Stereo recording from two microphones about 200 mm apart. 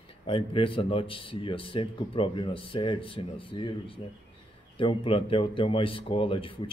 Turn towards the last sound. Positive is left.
turn(degrees=25)  # may be behind; listen again after turning